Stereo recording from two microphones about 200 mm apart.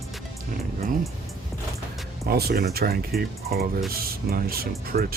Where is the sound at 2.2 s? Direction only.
50° right (ahead or behind).